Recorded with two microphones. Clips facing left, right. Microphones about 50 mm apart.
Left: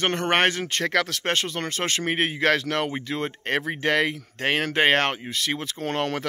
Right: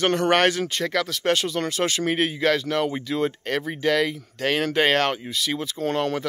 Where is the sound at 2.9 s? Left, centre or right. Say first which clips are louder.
Right 4 dB; left.